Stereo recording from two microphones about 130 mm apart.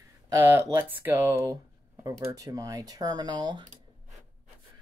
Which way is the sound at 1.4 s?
25° right (ahead or behind).